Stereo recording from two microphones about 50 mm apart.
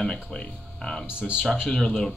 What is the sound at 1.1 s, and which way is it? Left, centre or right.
Speech, centre.